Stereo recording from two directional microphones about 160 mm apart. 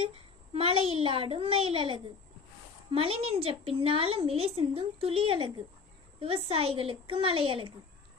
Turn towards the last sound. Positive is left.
turn(degrees=-35)  # may be behind; listen again after turning